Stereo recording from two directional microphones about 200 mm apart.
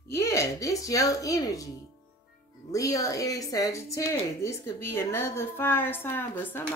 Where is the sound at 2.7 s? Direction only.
15° left (ahead or behind).